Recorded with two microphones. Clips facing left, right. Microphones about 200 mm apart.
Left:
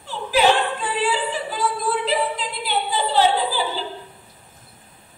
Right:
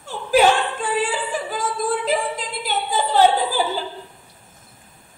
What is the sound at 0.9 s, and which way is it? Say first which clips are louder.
Singing: right 1 dB; 45° right (ahead or behind).